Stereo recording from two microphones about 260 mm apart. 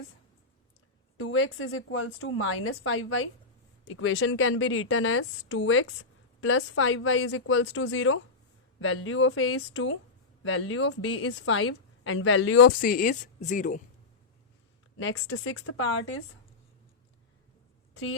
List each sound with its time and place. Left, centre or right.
1.1 s a woman's voice: left
12.8 s speech: left
14.9 s a woman's voice: left